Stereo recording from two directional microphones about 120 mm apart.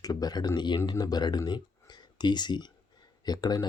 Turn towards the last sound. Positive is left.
turn(degrees=35)  # may be behind; listen again after turning